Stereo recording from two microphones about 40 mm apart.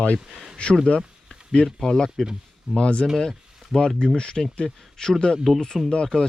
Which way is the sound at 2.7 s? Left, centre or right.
Left.